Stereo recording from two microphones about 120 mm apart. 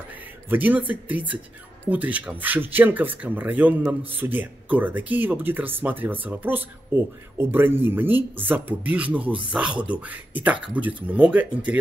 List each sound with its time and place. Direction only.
0.5 s speech: 15° right (ahead or behind)